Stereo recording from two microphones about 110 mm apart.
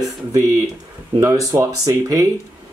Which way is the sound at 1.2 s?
30° right (ahead or behind).